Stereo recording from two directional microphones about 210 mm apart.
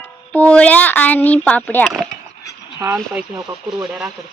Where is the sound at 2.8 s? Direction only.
10° right (ahead or behind).